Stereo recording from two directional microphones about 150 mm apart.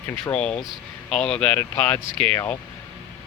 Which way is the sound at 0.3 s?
5° left (ahead or behind).